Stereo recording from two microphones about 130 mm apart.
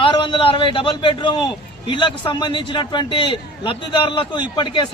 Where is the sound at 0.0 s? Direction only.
40° left (ahead or behind).